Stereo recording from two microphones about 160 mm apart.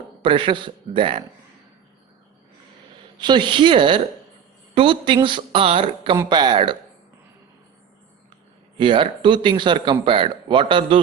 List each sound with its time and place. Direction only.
0.2 s speech: 30° right (ahead or behind)
3.2 s speech: 30° right (ahead or behind)
8.8 s speech: 30° right (ahead or behind)